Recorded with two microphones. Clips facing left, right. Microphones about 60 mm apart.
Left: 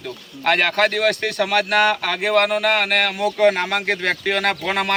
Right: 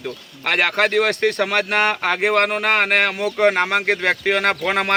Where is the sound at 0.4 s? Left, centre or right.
Centre; by 3.7 s right.